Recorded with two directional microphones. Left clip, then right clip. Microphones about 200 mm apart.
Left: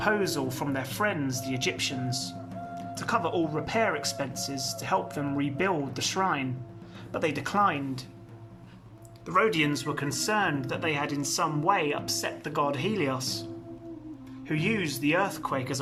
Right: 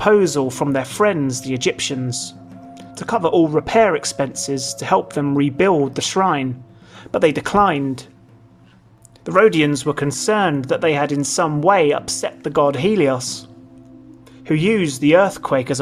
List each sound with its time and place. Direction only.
0.0 s speech: 35° right (ahead or behind)
9.2 s speech: 40° right (ahead or behind)